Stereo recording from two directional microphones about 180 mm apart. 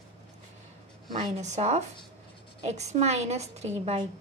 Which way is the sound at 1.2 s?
40° right (ahead or behind).